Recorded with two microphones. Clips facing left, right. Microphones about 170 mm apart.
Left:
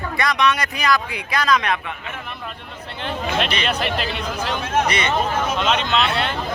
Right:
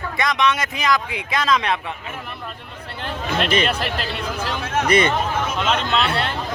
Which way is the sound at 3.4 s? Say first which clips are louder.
Right 5 dB; 50° right (ahead or behind).